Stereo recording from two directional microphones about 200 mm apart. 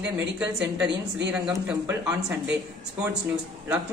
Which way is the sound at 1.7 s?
10° right (ahead or behind).